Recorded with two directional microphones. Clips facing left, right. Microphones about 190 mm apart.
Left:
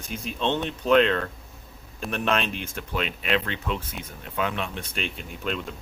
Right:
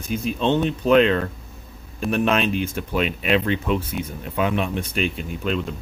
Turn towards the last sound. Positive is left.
turn(degrees=0)  # may be behind; listen again after turning